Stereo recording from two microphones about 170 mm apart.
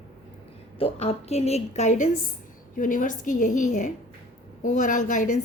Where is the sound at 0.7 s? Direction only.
35° left (ahead or behind).